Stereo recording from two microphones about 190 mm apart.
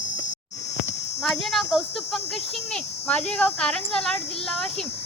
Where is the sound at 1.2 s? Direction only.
Centre (ahead or behind).